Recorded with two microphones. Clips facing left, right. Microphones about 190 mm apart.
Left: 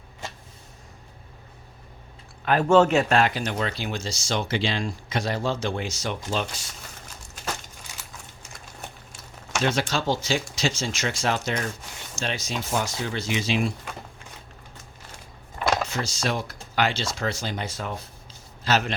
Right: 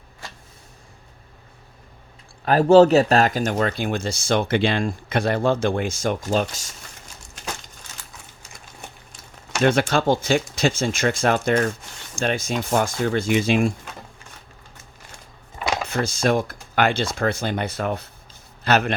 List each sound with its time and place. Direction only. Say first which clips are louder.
2.4 s speech: right 5 dB; 35° right (ahead or behind)
9.6 s speech: right 7 dB; 55° right (ahead or behind)
15.5 s a sound: left 1 dB; centre (ahead or behind)
15.9 s speech: right 7 dB; 55° right (ahead or behind)